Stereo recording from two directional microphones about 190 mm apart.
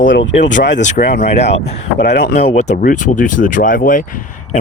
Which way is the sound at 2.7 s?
45° left (ahead or behind).